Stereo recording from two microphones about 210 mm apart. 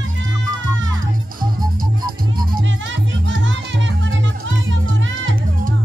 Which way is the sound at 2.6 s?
65° right (ahead or behind).